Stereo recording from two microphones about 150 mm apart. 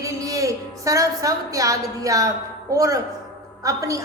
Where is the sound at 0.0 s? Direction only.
20° right (ahead or behind).